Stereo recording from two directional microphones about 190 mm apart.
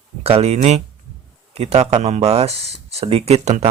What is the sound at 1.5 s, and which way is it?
Speech, 35° right (ahead or behind).